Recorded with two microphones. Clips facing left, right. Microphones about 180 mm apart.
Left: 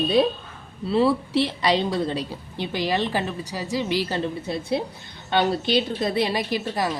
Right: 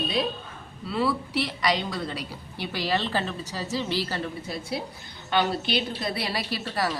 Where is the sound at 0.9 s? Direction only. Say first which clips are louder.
Left 6 dB; 25° left (ahead or behind).